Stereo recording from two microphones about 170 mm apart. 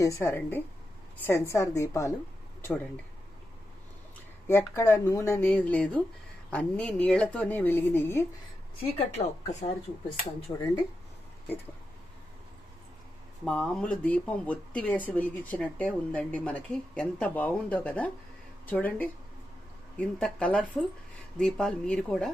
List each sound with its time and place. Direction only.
0.0 s speech: 15° left (ahead or behind)
4.4 s speech: 15° left (ahead or behind)
9.0 s speech: 40° left (ahead or behind)
10.5 s speech: 20° left (ahead or behind)
13.4 s speech: 5° left (ahead or behind)
20.1 s speech: 5° left (ahead or behind)